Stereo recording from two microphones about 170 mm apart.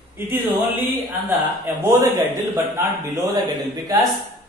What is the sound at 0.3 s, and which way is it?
A man's voice, 10° right (ahead or behind).